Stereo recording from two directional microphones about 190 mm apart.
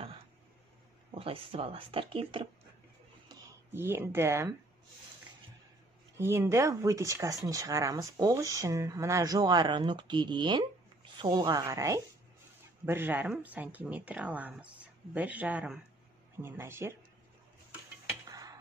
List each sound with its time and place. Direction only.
1.1 s speech: 30° right (ahead or behind)
3.3 s speech: 15° right (ahead or behind)
6.1 s speech: 15° right (ahead or behind)
18.3 s a sound: 20° right (ahead or behind)